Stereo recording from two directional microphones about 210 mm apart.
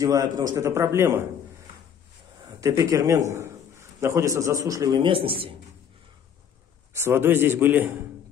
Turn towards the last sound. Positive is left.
turn(degrees=-10)  # may be behind; listen again after turning